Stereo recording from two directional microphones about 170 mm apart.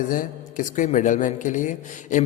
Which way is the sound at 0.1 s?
50° left (ahead or behind).